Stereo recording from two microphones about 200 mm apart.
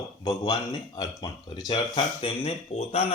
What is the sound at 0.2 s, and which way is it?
A man's voice, 20° left (ahead or behind).